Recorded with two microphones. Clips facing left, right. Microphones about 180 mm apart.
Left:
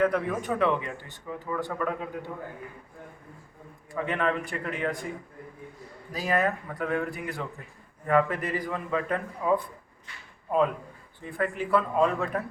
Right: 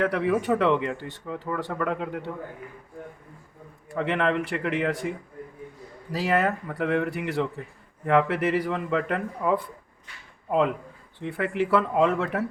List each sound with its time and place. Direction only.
0.0 s a man's voice: 75° right (ahead or behind)
3.9 s a man's voice: 80° right
6.1 s a man's voice: 75° right (ahead or behind)
11.2 s a man's voice: 80° right